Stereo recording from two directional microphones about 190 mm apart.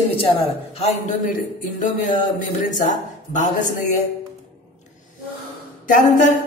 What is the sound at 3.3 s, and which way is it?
Speech, 40° left (ahead or behind).